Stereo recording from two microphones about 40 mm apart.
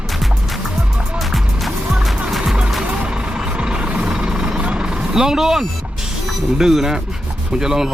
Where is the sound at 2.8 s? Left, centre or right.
Right.